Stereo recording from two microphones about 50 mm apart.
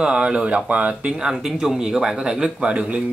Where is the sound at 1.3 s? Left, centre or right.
Centre.